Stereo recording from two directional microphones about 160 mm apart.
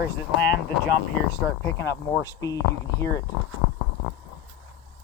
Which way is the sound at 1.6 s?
15° left (ahead or behind).